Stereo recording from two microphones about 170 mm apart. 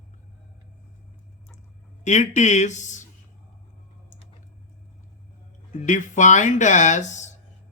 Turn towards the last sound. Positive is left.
turn(degrees=45)  # may be behind; listen again after turning